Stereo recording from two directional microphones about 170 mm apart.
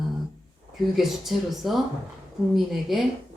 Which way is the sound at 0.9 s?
Centre (ahead or behind).